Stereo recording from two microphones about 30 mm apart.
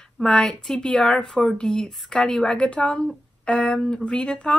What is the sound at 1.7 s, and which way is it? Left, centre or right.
Speech, left.